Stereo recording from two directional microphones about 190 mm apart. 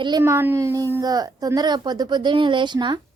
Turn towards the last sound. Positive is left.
turn(degrees=-25)  # may be behind; listen again after turning